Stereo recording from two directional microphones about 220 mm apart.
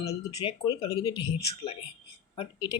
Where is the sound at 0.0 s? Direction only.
15° left (ahead or behind).